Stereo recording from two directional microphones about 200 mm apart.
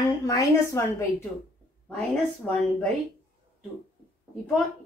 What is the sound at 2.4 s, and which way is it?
Speech, centre (ahead or behind).